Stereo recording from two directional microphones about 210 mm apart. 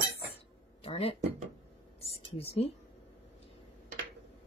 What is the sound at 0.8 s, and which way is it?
A woman's voice, 30° left (ahead or behind).